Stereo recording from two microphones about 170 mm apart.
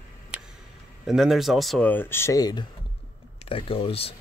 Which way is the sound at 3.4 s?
35° left (ahead or behind).